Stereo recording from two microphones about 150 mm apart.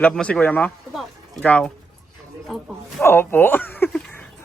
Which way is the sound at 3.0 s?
15° left (ahead or behind).